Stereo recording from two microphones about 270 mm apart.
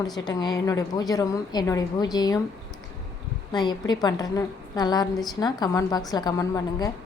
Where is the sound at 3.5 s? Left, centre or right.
Centre.